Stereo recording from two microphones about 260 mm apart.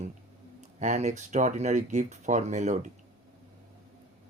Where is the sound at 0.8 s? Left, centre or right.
Right.